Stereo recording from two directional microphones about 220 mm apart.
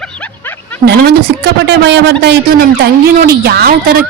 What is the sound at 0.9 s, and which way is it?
Speech, 45° right (ahead or behind).